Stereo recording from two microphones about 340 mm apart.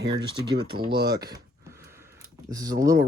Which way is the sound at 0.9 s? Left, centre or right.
Centre.